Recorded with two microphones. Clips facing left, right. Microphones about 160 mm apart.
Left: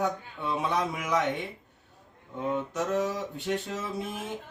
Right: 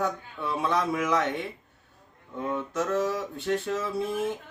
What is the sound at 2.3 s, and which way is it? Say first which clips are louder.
Speech: even; 15° left (ahead or behind).